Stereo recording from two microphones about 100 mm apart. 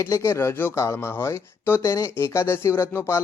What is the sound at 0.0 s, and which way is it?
Speech, 30° left (ahead or behind).